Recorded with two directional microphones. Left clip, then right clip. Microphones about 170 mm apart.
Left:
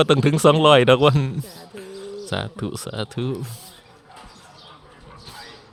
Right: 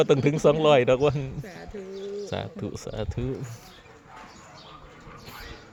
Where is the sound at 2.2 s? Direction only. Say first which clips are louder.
Left 5 dB; 35° left (ahead or behind).